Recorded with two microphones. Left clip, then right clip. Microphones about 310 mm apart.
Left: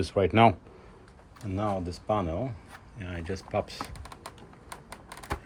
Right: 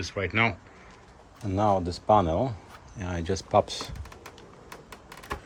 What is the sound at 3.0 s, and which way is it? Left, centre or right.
Speech, right.